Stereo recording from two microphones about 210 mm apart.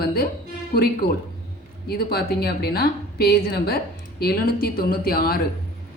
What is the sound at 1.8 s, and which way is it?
A woman's voice, 50° left (ahead or behind).